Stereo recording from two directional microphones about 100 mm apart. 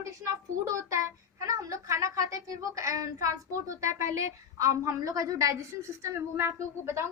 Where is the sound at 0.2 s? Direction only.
30° right (ahead or behind).